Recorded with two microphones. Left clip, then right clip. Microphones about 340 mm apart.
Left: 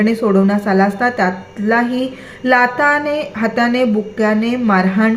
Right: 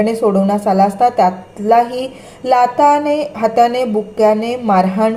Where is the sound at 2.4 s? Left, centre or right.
Right.